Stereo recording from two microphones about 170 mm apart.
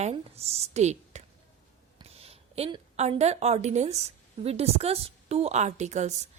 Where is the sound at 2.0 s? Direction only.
35° right (ahead or behind).